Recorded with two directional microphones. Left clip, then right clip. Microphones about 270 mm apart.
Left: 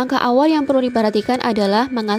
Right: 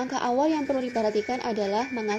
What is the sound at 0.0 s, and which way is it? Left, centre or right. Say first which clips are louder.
A woman's voice: left 9 dB; left.